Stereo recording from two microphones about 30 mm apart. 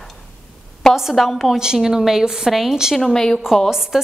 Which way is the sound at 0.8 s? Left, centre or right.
Left.